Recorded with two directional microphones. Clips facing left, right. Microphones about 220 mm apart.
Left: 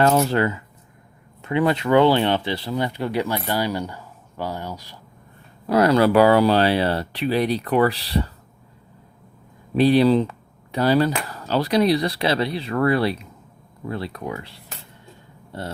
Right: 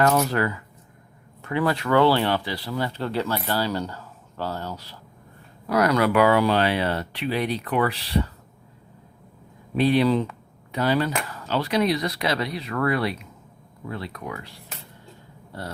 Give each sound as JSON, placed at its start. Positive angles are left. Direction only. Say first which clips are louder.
{"t": 0.0, "sound": "speech", "louder": "left 3 dB", "side_deg": 25}
{"t": 5.6, "sound": "speech", "louder": "left 4 dB", "side_deg": 30}
{"t": 9.7, "sound": "speech", "louder": "left 4 dB", "side_deg": 35}